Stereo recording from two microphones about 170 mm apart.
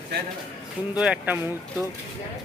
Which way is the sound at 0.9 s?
5° right (ahead or behind).